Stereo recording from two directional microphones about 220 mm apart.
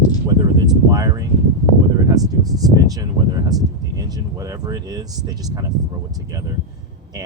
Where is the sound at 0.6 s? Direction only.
15° right (ahead or behind).